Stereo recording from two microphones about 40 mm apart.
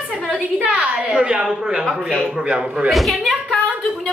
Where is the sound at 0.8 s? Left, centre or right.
Right.